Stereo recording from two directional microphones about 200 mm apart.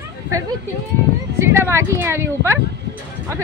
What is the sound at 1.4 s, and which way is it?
Speech, 10° right (ahead or behind).